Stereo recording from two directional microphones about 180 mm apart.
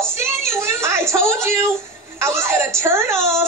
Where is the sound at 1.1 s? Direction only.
15° right (ahead or behind).